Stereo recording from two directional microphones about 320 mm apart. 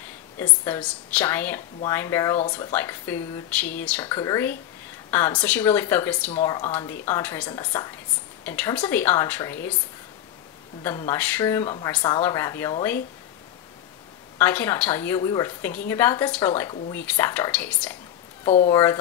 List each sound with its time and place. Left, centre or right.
0.4 s a woman's voice: centre
10.8 s speech: centre
14.4 s speech: centre
18.4 s speech: centre